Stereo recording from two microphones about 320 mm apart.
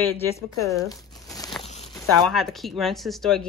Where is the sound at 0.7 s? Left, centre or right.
Centre.